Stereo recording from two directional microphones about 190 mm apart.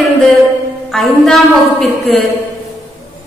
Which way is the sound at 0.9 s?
Centre (ahead or behind).